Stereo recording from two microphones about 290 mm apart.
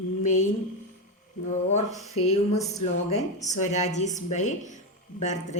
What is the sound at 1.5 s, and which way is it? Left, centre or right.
A woman's voice, left.